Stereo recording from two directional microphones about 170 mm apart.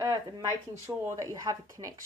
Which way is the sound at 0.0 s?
20° right (ahead or behind).